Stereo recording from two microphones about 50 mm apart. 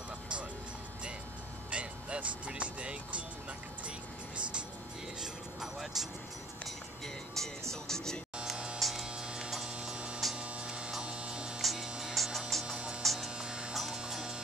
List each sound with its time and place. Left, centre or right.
1.7 s music: right
5.2 s music: centre
7.4 s speech: centre
8.7 s hum: centre
9.0 s hum: centre
9.5 s mains hum: centre
11.6 s mains hum: centre
12.0 s music: centre
12.6 s music: centre
13.0 s mains hum: centre
13.4 s mains hum: centre